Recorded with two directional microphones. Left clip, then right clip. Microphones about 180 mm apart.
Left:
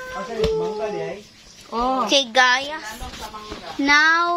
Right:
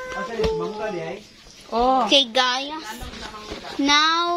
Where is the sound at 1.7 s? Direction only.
25° right (ahead or behind).